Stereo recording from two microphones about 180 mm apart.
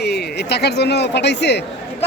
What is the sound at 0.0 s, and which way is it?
Speech, 65° left (ahead or behind).